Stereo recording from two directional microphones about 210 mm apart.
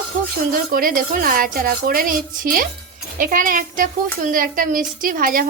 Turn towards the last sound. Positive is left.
turn(degrees=-40)  # may be behind; listen again after turning